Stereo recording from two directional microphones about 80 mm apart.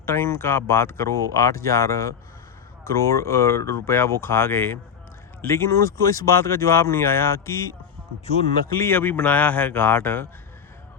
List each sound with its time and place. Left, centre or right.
0.0 s speech: left
8.8 s speech: left